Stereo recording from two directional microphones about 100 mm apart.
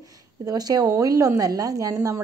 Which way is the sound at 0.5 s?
40° right (ahead or behind).